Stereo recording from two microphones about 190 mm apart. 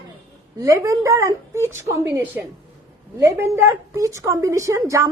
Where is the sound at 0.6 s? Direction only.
15° right (ahead or behind).